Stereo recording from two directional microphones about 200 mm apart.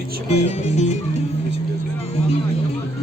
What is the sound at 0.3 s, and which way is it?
Speech, 30° left (ahead or behind).